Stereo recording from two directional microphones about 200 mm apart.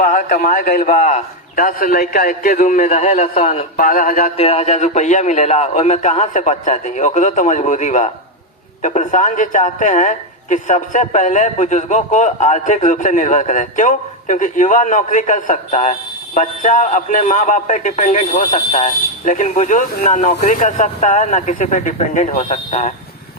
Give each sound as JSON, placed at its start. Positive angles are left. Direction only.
{"t": 0.0, "sound": "a woman's voice", "side_deg": 40}
{"t": 3.8, "sound": "music", "side_deg": 45}
{"t": 4.4, "sound": "a woman's voice", "side_deg": 30}